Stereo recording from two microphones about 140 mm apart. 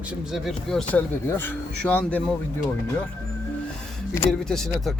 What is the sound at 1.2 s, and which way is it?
Speech, 15° left (ahead or behind).